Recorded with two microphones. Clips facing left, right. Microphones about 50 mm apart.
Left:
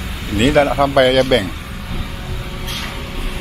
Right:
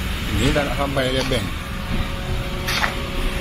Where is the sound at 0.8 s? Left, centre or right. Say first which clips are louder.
Left 9 dB; left.